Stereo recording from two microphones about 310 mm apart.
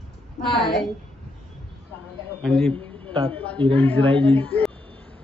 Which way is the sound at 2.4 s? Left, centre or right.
Centre.